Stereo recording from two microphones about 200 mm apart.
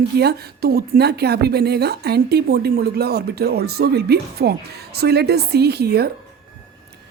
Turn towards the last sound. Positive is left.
turn(degrees=-50)  # may be behind; listen again after turning